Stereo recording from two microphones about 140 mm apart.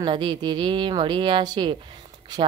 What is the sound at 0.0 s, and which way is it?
Speech, 35° right (ahead or behind).